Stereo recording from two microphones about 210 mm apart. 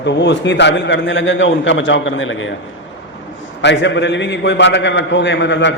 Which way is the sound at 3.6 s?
55° left (ahead or behind).